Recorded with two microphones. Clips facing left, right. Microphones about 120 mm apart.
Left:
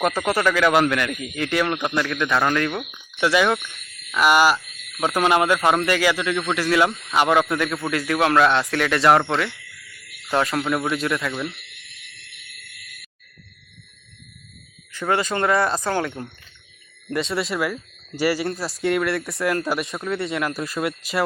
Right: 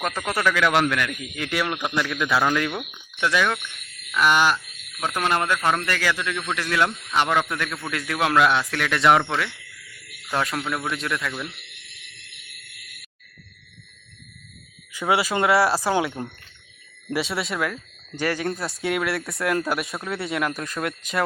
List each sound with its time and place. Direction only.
0.0 s a man's voice: 10° left (ahead or behind)
3.2 s a man's voice: 5° left (ahead or behind)
10.3 s a man's voice: centre (ahead or behind)
14.9 s a man's voice: 10° right (ahead or behind)